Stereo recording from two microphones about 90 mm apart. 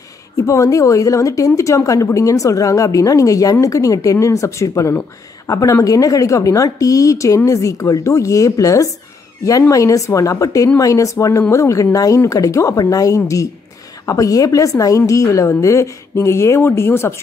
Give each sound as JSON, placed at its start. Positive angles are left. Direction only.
{"t": 0.5, "sound": "a woman's voice", "side_deg": 40}